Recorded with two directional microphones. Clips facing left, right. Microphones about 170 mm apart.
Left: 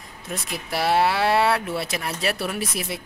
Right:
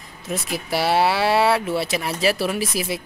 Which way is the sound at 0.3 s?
Centre (ahead or behind).